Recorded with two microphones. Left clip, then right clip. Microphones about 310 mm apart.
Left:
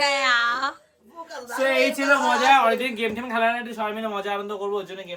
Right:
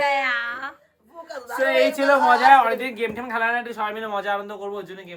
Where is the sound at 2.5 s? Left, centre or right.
Centre.